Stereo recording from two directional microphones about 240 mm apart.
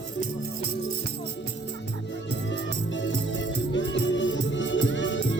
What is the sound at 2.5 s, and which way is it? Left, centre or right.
Music, left.